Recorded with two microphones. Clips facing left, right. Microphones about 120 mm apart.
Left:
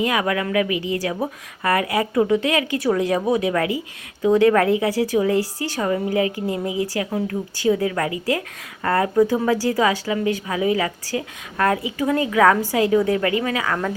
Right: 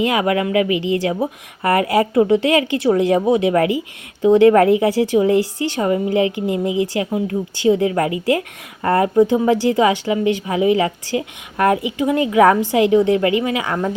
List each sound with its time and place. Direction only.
0.0 s a woman's voice: 25° right (ahead or behind)